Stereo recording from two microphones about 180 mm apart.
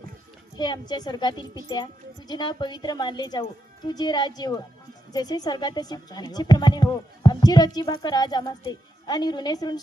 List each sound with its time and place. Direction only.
0.5 s a woman's voice: 25° left (ahead or behind)